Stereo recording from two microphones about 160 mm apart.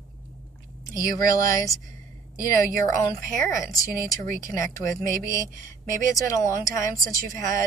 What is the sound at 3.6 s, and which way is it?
Speech, 20° left (ahead or behind).